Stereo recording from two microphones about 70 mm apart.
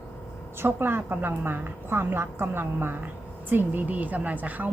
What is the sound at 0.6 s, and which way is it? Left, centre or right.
A woman's voice, right.